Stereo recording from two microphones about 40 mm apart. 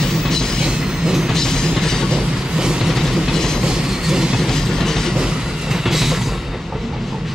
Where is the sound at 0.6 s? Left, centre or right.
Centre.